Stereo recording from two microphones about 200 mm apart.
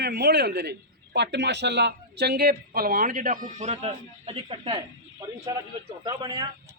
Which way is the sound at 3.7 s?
30° right (ahead or behind).